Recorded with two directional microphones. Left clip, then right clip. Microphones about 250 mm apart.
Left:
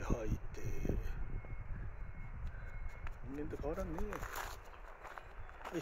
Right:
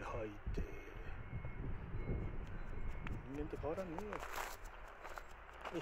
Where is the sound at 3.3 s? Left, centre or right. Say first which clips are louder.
Left 1 dB; centre.